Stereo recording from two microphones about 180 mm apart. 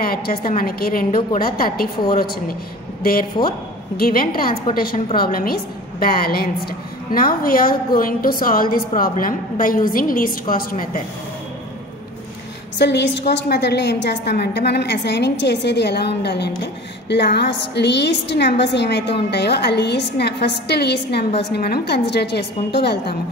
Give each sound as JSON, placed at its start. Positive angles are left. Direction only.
{"t": 0.0, "sound": "a woman's voice", "side_deg": 55}
{"t": 12.7, "sound": "a woman's voice", "side_deg": 70}